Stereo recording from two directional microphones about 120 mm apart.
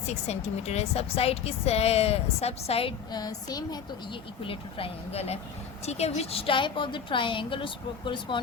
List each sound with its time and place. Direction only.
0.0 s speech: 70° left (ahead or behind)
3.1 s a woman's voice: 35° left (ahead or behind)
4.4 s a woman's voice: 55° left (ahead or behind)